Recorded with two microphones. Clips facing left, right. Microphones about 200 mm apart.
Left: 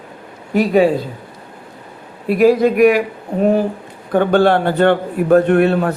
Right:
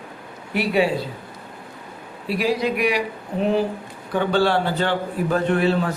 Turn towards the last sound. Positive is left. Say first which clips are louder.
# left 6 dB
turn(degrees=55)  # may be behind; listen again after turning